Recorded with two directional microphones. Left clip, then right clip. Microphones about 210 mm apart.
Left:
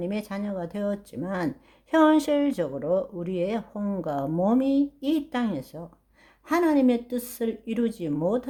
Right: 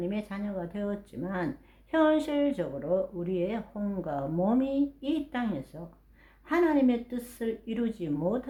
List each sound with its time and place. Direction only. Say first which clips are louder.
0.0 s speech: left 3 dB; 45° left (ahead or behind)